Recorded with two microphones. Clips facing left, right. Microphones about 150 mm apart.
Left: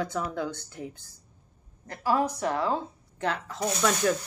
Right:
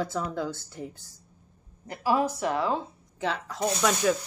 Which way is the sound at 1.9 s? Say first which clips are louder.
Right 1 dB; 10° right (ahead or behind).